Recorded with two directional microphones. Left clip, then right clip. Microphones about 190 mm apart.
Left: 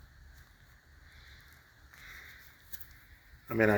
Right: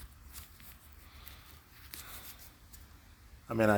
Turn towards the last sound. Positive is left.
turn(degrees=-25)  # may be behind; listen again after turning